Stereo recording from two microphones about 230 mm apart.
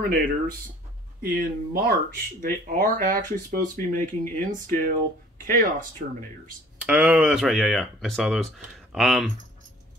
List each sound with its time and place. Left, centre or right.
0.1 s speech: right
6.8 s speech: centre